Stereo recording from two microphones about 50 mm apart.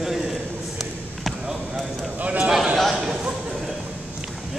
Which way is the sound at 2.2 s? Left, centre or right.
Right.